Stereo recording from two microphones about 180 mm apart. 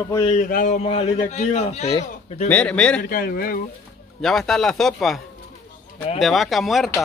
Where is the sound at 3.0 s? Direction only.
55° left (ahead or behind).